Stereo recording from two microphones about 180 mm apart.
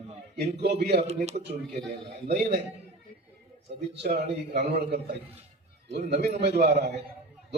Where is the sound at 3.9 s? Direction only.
65° right (ahead or behind).